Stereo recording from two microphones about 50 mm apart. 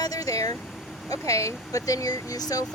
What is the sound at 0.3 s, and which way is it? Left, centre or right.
Vehicle, left.